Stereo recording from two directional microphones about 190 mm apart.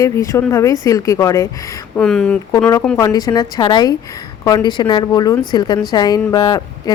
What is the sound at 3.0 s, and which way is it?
A woman's voice, 20° left (ahead or behind).